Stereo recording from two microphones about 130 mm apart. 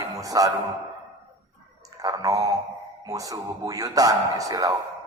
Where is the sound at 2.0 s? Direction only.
30° right (ahead or behind).